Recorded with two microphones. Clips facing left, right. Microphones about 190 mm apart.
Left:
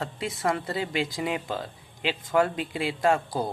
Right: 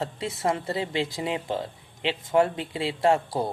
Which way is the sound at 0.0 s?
25° right (ahead or behind).